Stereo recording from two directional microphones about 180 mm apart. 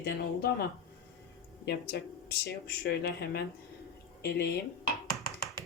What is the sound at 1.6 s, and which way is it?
Speech, 65° left (ahead or behind).